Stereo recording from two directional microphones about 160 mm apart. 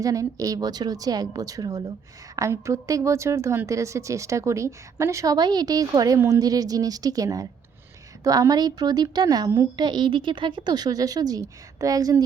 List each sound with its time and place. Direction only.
0.0 s a woman's voice: 20° right (ahead or behind)